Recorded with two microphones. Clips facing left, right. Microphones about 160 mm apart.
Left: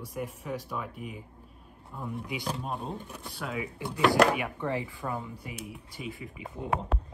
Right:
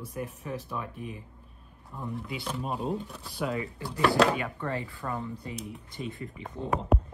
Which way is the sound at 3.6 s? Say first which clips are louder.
Left 4 dB; 15° left (ahead or behind).